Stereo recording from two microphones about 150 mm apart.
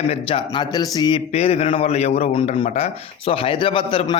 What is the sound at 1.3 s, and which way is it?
A man's voice, 45° left (ahead or behind).